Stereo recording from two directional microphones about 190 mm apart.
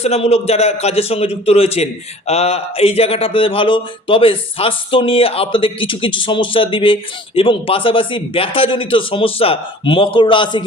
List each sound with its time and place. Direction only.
0.0 s a man's voice: 35° left (ahead or behind)